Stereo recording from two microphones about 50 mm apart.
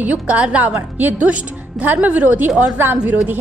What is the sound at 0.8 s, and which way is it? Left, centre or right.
A woman's voice, right.